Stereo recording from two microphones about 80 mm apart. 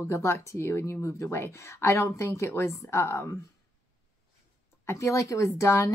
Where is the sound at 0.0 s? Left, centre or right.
Left.